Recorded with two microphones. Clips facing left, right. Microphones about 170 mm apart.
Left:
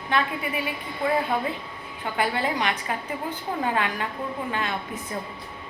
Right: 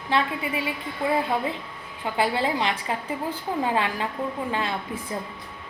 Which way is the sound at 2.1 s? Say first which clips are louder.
Right 2 dB; 25° right (ahead or behind).